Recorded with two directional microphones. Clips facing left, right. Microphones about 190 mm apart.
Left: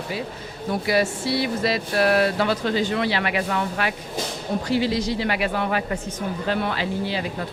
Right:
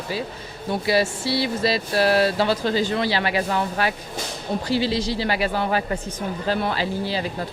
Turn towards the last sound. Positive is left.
turn(degrees=-35)  # may be behind; listen again after turning